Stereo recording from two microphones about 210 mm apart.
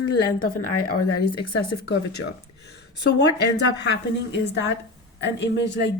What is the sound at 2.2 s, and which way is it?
Speech, 90° left.